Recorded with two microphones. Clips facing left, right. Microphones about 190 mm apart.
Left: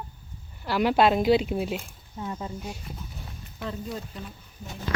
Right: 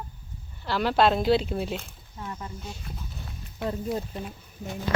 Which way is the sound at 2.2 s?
20° left (ahead or behind).